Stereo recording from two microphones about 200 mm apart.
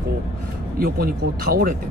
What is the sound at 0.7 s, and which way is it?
Speech, 50° right (ahead or behind).